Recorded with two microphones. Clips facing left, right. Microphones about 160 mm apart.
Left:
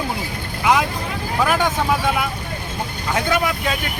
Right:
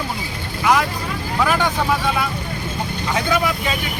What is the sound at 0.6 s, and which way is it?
Vehicle, 15° left (ahead or behind).